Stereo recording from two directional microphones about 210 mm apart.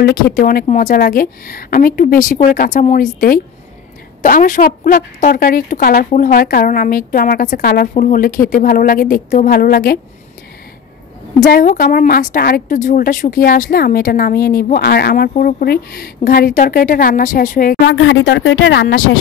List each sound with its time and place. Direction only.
0.0 s a woman's voice: 45° left (ahead or behind)
4.2 s a woman's voice: 40° left (ahead or behind)
11.3 s a woman's voice: 40° left (ahead or behind)
17.8 s speech: 65° left (ahead or behind)